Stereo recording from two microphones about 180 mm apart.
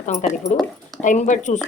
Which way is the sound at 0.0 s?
40° left (ahead or behind).